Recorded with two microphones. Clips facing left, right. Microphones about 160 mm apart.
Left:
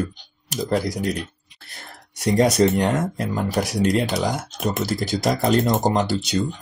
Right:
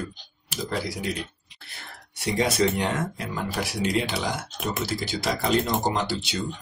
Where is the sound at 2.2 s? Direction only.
45° left (ahead or behind).